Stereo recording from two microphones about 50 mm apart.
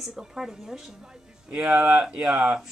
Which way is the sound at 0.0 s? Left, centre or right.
Centre.